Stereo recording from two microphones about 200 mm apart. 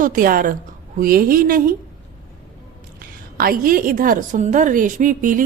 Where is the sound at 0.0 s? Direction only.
40° right (ahead or behind).